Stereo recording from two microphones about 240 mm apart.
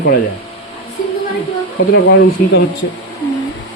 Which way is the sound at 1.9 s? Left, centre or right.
Left.